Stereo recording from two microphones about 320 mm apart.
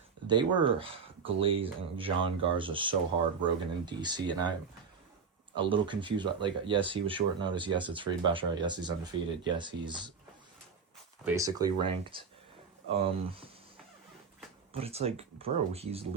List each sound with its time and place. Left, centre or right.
0.3 s speech: centre
5.5 s speech: centre
11.3 s speech: centre
14.7 s speech: centre